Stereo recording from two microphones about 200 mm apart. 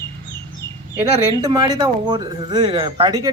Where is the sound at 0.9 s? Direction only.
15° right (ahead or behind).